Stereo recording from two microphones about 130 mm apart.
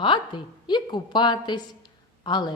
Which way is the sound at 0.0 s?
40° left (ahead or behind).